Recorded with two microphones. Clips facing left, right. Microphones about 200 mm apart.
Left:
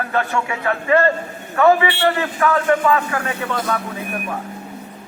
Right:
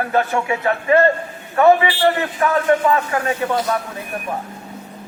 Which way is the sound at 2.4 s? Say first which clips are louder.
Right 1 dB; 25° right (ahead or behind).